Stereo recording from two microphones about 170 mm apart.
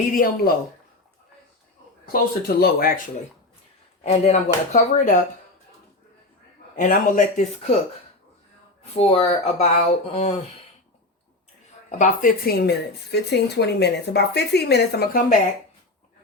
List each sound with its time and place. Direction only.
0.1 s speech: 55° left (ahead or behind)
2.6 s speech: 65° left (ahead or behind)
4.0 s speech: 40° left (ahead or behind)
6.7 s speech: 50° left (ahead or behind)
9.0 s speech: 35° left (ahead or behind)
11.9 s speech: 45° left (ahead or behind); by 15.2 s 70° left (ahead or behind)